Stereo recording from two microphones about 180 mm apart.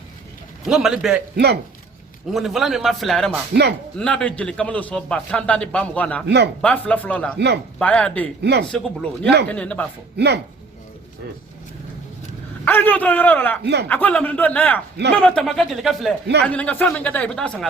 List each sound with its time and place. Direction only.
0.6 s a man's voice: centre (ahead or behind)
2.3 s a man's voice: centre (ahead or behind)
3.5 s speech: 70° right (ahead or behind)
3.9 s a man's voice: 5° left (ahead or behind)
6.2 s speech: 70° right (ahead or behind)
6.6 s a man's voice: 10° left (ahead or behind)
7.3 s speech: 70° right (ahead or behind)
7.8 s a man's voice: 5° left (ahead or behind)
8.4 s speech: 65° right (ahead or behind)
8.7 s a man's voice: 5° left (ahead or behind)
10.2 s speech: 70° right (ahead or behind)
12.6 s a man's voice: 10° left (ahead or behind)